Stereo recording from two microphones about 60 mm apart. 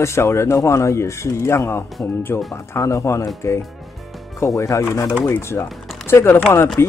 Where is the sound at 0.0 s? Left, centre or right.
Left.